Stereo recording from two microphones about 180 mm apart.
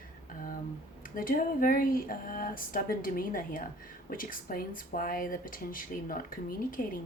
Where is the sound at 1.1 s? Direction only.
50° left (ahead or behind).